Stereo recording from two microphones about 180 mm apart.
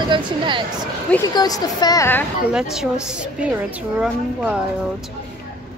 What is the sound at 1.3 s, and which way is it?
Speech, 20° left (ahead or behind).